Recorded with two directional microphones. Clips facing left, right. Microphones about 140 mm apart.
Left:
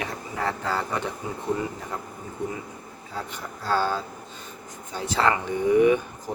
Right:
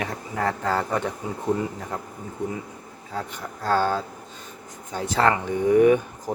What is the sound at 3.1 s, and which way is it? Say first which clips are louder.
Speech: right 3 dB; 45° right (ahead or behind).